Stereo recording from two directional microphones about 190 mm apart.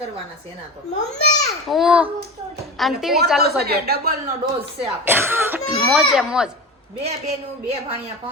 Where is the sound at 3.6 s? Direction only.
55° right (ahead or behind).